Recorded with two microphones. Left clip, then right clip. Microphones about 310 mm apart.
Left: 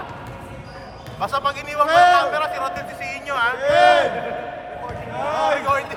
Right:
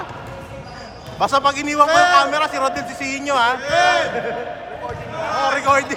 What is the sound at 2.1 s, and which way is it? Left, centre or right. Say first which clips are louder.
A man's voice: right 3 dB; right.